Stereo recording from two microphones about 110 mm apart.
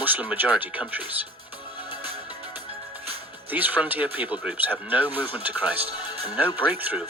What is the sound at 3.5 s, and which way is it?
Speech, 15° right (ahead or behind).